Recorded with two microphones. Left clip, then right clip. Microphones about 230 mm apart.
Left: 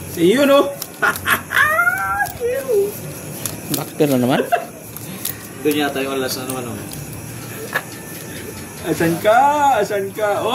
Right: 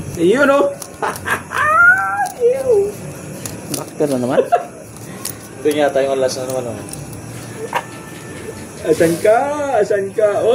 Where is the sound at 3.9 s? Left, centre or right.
Left.